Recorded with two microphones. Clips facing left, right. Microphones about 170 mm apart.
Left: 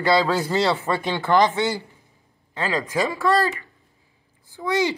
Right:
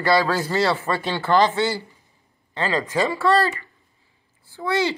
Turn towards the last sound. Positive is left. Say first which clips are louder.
# even
turn(degrees=15)  # may be behind; listen again after turning